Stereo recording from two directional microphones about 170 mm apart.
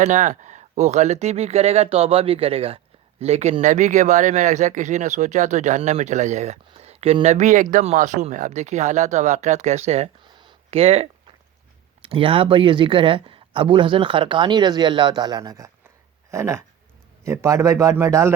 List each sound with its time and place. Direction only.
0.0 s speech: 45° right (ahead or behind)
10.2 s a sound: 25° right (ahead or behind)
12.0 s a man's voice: 30° right (ahead or behind)